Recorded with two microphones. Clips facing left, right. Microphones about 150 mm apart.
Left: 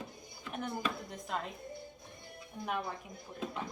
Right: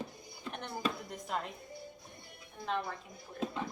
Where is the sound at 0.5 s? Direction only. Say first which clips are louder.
Left 1 dB; centre (ahead or behind).